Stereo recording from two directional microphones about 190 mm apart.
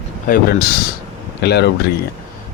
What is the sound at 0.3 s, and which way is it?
Speech, 40° left (ahead or behind).